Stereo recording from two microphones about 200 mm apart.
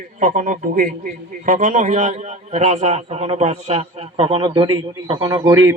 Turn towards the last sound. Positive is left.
turn(degrees=-20)  # may be behind; listen again after turning